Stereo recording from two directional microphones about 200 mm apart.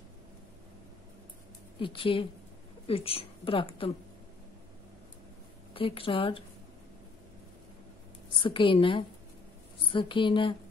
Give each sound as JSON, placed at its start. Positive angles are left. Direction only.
{"t": 1.8, "sound": "a woman's voice", "side_deg": 25}
{"t": 5.7, "sound": "a woman's voice", "side_deg": 25}
{"t": 8.4, "sound": "a woman's voice", "side_deg": 25}